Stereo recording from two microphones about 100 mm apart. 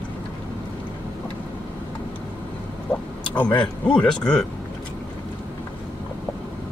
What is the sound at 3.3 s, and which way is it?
Speech, 50° left (ahead or behind).